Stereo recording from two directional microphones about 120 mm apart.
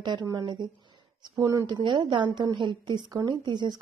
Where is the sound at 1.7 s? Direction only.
40° right (ahead or behind).